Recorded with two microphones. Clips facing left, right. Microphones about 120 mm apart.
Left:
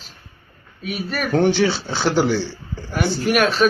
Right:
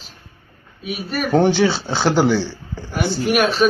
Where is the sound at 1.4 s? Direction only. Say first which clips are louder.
Right 1 dB; 35° right (ahead or behind).